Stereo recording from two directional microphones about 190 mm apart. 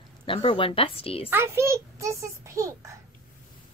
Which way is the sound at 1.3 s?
15° right (ahead or behind).